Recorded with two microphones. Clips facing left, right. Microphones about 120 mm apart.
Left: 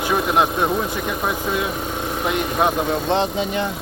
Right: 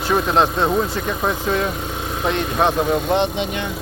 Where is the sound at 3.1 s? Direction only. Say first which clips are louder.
Right 1 dB; 35° left (ahead or behind).